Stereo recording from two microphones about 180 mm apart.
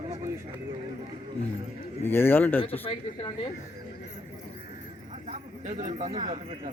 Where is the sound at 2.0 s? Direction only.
10° left (ahead or behind).